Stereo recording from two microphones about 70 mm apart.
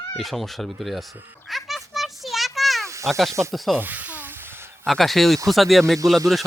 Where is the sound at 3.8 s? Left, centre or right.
Right.